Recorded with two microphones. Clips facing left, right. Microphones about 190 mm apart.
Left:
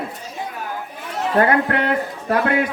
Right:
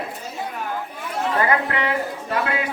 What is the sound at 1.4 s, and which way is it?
Speech, 60° left (ahead or behind).